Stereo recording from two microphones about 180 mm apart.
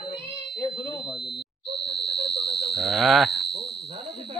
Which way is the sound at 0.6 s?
25° left (ahead or behind).